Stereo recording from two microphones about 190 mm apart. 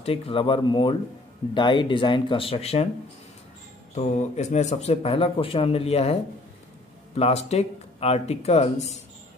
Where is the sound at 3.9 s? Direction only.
35° left (ahead or behind).